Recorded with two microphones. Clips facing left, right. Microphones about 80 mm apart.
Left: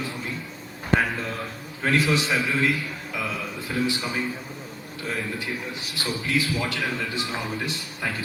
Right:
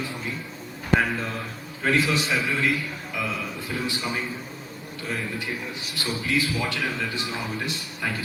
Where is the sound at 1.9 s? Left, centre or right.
Left.